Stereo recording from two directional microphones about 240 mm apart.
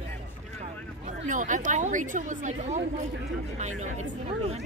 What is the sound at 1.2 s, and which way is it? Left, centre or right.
A woman's voice, right.